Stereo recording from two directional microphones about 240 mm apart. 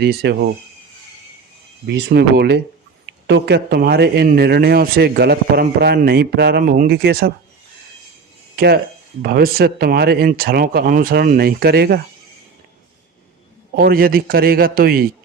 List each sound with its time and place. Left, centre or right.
0.0 s speech: right
1.9 s a man's voice: right
8.5 s a man's voice: right
13.7 s a man's voice: right